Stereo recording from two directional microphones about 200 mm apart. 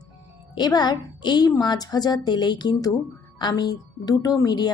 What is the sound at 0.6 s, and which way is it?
A woman's voice, 20° left (ahead or behind).